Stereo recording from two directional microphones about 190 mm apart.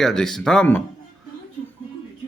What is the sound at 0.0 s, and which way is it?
Speech, centre (ahead or behind).